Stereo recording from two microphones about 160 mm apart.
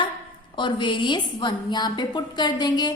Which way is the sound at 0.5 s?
30° left (ahead or behind).